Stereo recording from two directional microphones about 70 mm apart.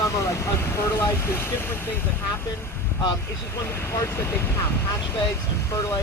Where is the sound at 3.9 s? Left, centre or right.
Left.